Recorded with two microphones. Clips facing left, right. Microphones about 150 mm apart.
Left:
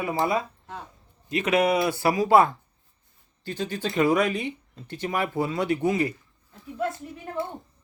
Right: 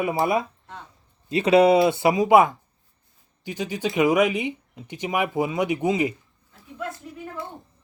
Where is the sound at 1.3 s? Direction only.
30° right (ahead or behind).